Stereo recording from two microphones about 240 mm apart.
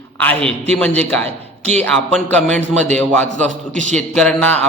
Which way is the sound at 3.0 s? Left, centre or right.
Centre.